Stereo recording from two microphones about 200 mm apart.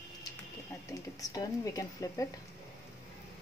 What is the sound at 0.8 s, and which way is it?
Speech, 15° left (ahead or behind).